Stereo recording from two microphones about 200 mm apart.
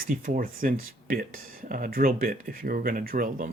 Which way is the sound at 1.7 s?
45° right (ahead or behind).